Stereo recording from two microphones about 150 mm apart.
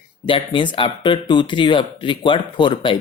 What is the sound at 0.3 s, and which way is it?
Speech, 35° left (ahead or behind).